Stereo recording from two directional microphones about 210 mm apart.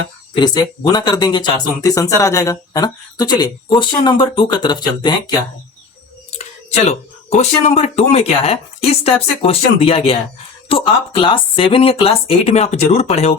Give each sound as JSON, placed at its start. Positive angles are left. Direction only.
{"t": 0.3, "sound": "speech", "side_deg": 20}
{"t": 6.3, "sound": "speech", "side_deg": 30}